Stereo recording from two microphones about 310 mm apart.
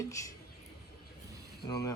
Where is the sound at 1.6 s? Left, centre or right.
Centre.